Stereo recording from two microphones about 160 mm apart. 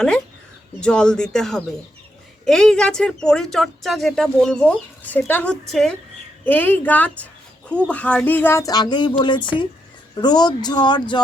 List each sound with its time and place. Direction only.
0.8 s speech: 5° left (ahead or behind); by 11.2 s 30° left (ahead or behind)